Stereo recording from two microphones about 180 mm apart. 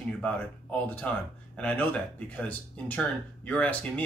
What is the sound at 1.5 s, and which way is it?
A man's voice, 5° left (ahead or behind).